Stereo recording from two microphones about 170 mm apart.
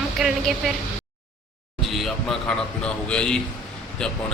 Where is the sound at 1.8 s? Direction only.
Centre (ahead or behind).